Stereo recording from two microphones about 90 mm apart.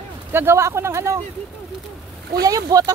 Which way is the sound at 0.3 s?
25° right (ahead or behind).